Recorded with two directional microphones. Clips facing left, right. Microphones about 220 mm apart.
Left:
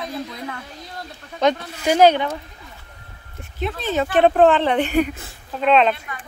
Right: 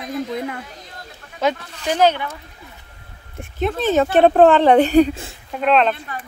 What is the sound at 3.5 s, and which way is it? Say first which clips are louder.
Speech: right 5 dB; 50° right (ahead or behind).